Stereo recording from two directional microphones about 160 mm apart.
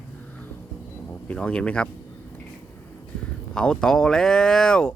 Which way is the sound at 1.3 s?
10° left (ahead or behind).